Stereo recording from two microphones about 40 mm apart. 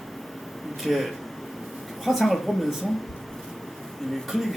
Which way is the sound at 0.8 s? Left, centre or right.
Centre.